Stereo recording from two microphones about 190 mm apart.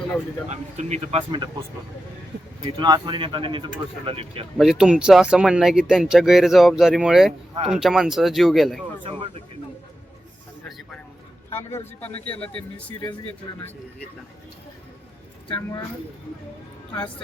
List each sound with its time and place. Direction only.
0.4 s speech: 35° right (ahead or behind)
2.6 s speech: 25° right (ahead or behind)
4.5 s speech: centre (ahead or behind)
9.0 s speech: 30° right (ahead or behind)
11.5 s a man's voice: 10° left (ahead or behind)